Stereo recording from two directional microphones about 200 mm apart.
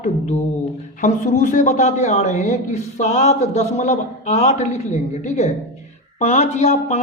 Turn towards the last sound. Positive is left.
turn(degrees=35)  # may be behind; listen again after turning